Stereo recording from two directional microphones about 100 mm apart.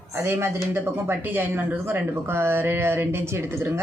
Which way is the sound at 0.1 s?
25° right (ahead or behind).